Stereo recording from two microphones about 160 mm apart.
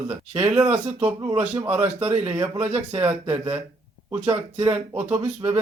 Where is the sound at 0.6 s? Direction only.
40° right (ahead or behind).